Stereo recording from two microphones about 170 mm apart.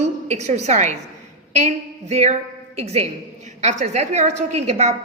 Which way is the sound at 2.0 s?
40° right (ahead or behind).